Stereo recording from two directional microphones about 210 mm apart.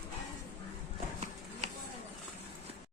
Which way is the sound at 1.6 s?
30° right (ahead or behind).